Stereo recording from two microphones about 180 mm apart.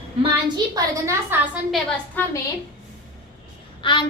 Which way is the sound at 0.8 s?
15° right (ahead or behind).